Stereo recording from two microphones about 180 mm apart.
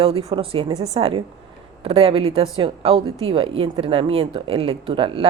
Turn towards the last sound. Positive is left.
turn(degrees=-30)  # may be behind; listen again after turning